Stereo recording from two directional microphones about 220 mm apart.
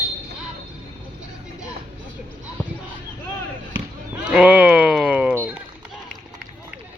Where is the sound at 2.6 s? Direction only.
10° left (ahead or behind).